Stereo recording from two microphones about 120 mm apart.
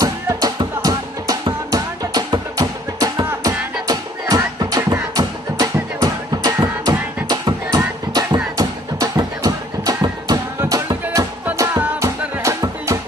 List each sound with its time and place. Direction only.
0.0 s music: 30° right (ahead or behind)